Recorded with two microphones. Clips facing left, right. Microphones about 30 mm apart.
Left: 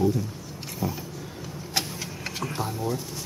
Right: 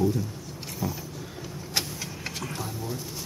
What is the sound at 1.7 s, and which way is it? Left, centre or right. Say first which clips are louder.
Vehicle: left 1 dB; centre.